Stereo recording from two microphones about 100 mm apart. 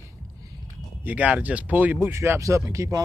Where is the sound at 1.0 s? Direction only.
15° right (ahead or behind); by 3.0 s 30° right (ahead or behind).